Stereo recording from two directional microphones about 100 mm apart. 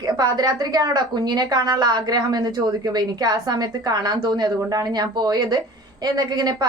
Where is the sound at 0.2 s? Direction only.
40° right (ahead or behind).